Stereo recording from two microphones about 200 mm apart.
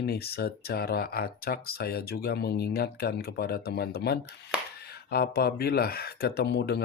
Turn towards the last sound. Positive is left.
turn(degrees=55)  # may be behind; listen again after turning